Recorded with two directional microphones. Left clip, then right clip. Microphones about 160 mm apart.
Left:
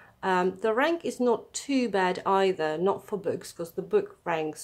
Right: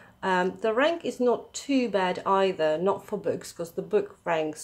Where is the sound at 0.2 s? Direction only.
15° left (ahead or behind).